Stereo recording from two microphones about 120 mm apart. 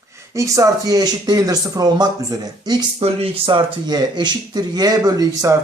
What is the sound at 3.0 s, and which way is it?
Speech, 50° right (ahead or behind).